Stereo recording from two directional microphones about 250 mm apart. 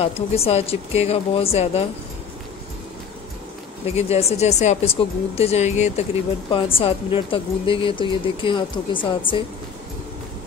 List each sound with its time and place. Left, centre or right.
0.0 s speech: left
3.8 s speech: left